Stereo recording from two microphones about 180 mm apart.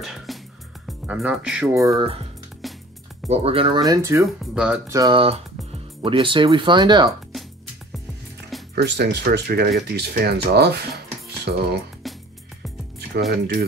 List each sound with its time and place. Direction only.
0.0 s music: centre (ahead or behind)
0.8 s speech: 5° right (ahead or behind)
2.6 s music: centre (ahead or behind)
3.3 s speech: 35° right (ahead or behind); by 4.3 s 15° right (ahead or behind)
4.4 s speech: 5° right (ahead or behind)
4.9 s speech: 25° right (ahead or behind)
8.7 s speech: 65° right (ahead or behind)
12.0 s music: centre (ahead or behind)
13.3 s speech: 60° right (ahead or behind)